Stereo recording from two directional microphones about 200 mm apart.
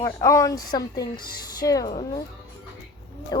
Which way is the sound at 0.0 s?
15° left (ahead or behind).